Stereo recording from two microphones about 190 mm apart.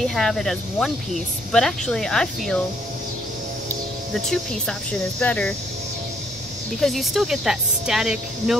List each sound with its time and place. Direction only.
0.0 s speech: centre (ahead or behind)
4.1 s speech: centre (ahead or behind)
6.8 s speech: centre (ahead or behind)